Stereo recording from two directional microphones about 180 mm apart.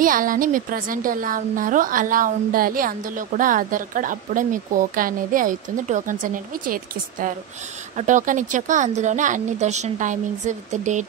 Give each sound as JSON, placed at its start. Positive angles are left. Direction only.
{"t": 0.0, "sound": "a woman's voice", "side_deg": -50}